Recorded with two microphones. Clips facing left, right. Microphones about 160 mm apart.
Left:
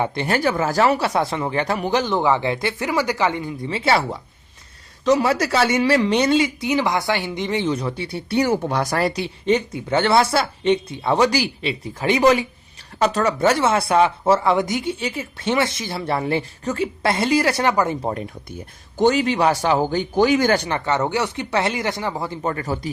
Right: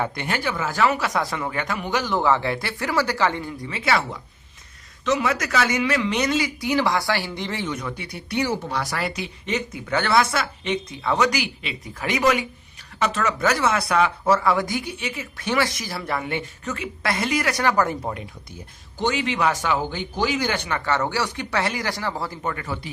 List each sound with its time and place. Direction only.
0.0 s speech: 30° left (ahead or behind)
2.1 s speech: 20° left (ahead or behind)
3.7 s speech: 30° left (ahead or behind)
8.4 s speech: 50° left (ahead or behind); by 18.1 s 20° left (ahead or behind)
18.9 s speech: 40° left (ahead or behind)
20.7 s speech: 20° left (ahead or behind)
22.4 s speech: 35° left (ahead or behind)